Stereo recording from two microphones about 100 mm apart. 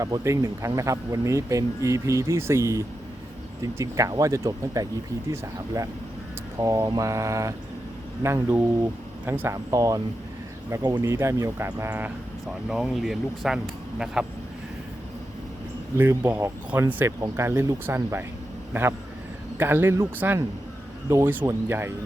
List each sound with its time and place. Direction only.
0.0 s speech: 35° right (ahead or behind)
9.6 s speech: 35° right (ahead or behind); by 12.1 s 15° right (ahead or behind)
12.6 s speech: 5° right (ahead or behind)
16.0 s speech: 20° right (ahead or behind)